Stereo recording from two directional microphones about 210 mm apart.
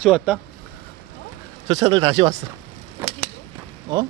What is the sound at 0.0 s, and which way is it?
Speech, 5° right (ahead or behind).